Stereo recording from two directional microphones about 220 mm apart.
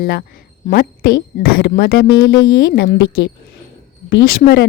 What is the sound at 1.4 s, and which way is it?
Speech, 40° left (ahead or behind).